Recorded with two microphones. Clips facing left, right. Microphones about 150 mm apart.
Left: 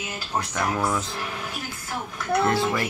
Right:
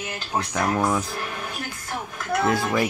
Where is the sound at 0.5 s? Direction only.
15° right (ahead or behind).